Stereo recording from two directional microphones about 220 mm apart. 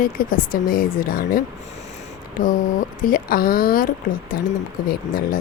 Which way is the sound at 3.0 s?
40° left (ahead or behind).